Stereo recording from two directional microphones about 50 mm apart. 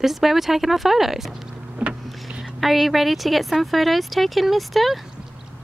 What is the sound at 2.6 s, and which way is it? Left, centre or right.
A child's voice, centre.